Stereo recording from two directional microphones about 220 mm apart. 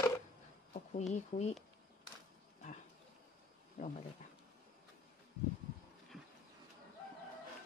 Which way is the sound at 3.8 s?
35° left (ahead or behind).